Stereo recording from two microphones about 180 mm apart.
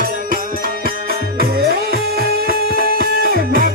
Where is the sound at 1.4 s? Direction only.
60° right (ahead or behind).